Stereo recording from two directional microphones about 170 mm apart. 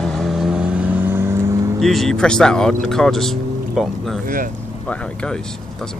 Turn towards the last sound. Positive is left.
turn(degrees=5)  # may be behind; listen again after turning